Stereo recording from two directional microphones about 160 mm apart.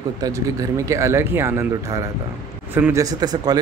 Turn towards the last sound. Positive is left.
turn(degrees=-20)  # may be behind; listen again after turning